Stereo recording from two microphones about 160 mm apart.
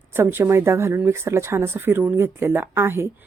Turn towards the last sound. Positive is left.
turn(degrees=-15)  # may be behind; listen again after turning